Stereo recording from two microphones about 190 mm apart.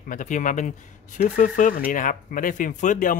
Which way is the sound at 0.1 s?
40° left (ahead or behind).